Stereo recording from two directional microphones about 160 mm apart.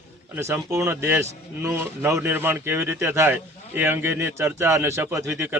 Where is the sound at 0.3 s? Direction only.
15° right (ahead or behind).